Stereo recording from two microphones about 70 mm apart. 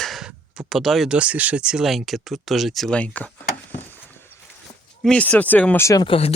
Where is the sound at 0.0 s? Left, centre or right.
Centre.